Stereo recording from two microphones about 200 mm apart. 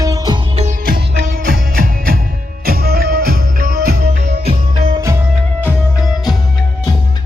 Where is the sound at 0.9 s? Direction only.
45° right (ahead or behind).